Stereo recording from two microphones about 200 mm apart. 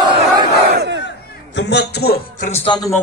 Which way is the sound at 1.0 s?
60° left (ahead or behind).